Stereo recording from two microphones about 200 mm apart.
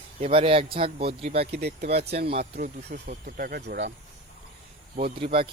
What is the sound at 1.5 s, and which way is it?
Speech, 55° right (ahead or behind).